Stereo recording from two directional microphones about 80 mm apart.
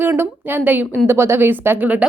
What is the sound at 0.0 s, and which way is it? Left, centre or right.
A woman's voice, right.